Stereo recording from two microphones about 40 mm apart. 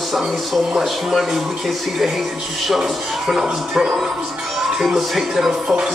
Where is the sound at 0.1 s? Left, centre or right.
Centre.